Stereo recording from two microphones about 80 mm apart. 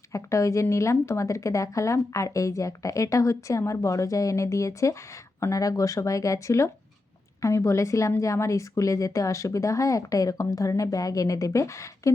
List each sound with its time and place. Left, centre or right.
0.1 s speech: left